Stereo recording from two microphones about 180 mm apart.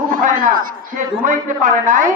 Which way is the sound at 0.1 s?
50° right (ahead or behind).